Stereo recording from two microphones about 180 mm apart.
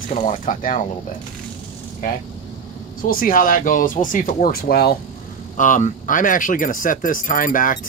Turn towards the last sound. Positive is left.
turn(degrees=50)  # may be behind; listen again after turning